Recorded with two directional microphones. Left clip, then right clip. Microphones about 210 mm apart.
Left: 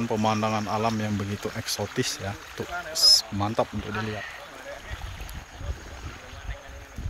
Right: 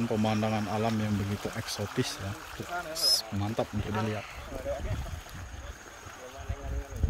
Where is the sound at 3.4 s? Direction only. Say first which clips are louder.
Left 7 dB; 5° right (ahead or behind).